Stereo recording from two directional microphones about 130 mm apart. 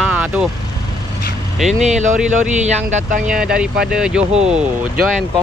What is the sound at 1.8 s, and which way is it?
Speech, 65° right (ahead or behind).